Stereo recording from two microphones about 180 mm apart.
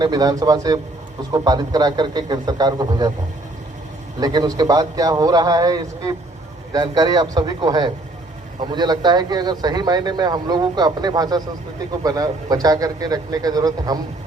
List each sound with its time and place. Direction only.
0.0 s speech: 20° right (ahead or behind)
4.2 s speech: 20° right (ahead or behind)